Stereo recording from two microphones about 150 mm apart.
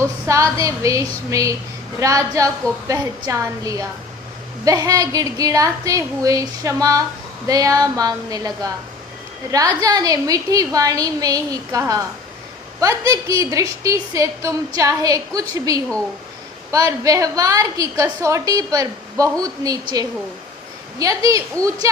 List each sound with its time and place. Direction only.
0.3 s a woman's voice: 20° right (ahead or behind)